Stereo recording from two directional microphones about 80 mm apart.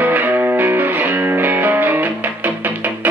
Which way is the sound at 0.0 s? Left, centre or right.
Right.